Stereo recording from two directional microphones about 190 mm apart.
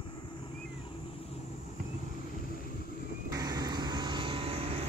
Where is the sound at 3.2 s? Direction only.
20° right (ahead or behind).